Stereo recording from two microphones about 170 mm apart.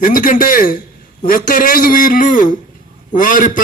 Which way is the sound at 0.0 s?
55° left (ahead or behind).